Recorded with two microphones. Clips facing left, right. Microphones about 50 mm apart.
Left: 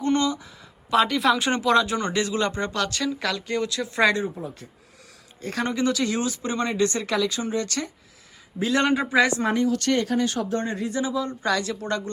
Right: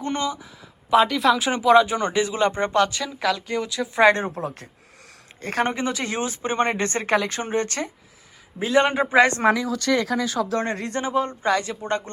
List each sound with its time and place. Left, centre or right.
0.0 s a sound: centre
0.9 s speech: centre; by 2.9 s right
2.9 s speech: centre
4.2 s speech: right
5.4 s speech: right
8.5 s speech: centre
8.9 s speech: right
9.4 s speech: right
11.0 s speech: right
11.4 s speech: right